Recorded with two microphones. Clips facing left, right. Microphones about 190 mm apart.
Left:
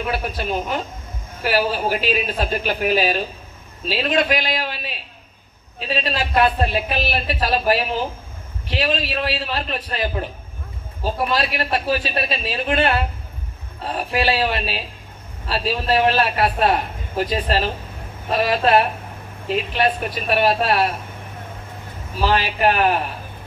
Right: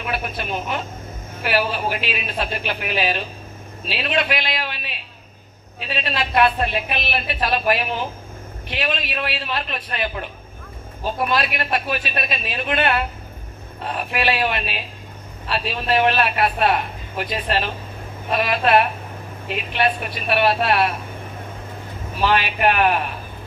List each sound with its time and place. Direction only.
0.1 s a man's voice: 35° left (ahead or behind)
11.3 s a man's voice: 35° left (ahead or behind)
22.2 s a man's voice: 35° left (ahead or behind)